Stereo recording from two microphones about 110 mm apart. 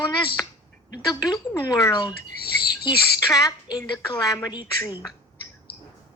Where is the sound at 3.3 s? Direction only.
30° left (ahead or behind).